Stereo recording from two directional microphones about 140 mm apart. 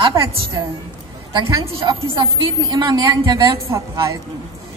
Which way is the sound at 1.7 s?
35° right (ahead or behind).